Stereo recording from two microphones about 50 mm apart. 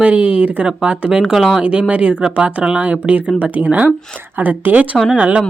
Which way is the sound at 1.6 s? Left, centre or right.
Right.